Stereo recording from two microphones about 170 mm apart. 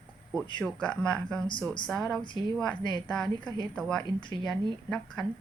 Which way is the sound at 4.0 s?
25° left (ahead or behind).